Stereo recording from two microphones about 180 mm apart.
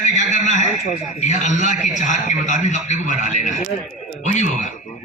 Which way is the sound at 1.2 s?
40° left (ahead or behind).